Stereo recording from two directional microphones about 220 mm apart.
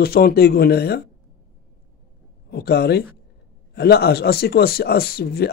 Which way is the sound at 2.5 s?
45° left (ahead or behind).